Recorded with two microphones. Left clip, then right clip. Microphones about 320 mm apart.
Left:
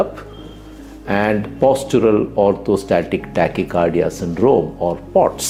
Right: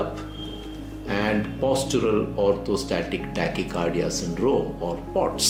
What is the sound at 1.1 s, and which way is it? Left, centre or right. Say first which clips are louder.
Speech: left 8 dB; left.